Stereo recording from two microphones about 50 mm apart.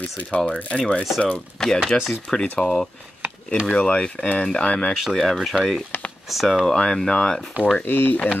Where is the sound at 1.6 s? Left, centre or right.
Centre.